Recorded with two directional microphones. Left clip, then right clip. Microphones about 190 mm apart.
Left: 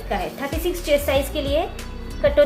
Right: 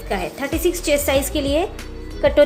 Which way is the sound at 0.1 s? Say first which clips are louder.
Right 2 dB; 55° right (ahead or behind).